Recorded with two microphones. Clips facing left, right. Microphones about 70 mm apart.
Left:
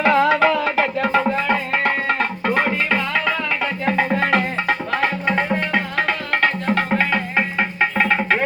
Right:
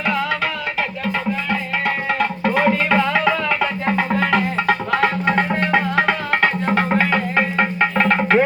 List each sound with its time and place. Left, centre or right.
0.3 s music: left
2.4 s music: centre